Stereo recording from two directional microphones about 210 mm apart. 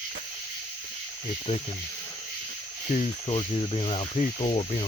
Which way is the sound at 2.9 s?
30° left (ahead or behind).